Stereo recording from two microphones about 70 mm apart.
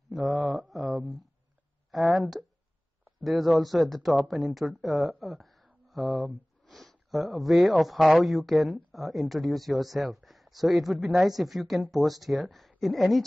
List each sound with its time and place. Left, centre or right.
0.1 s mantra: centre
1.9 s a sound: centre
3.2 s speech: centre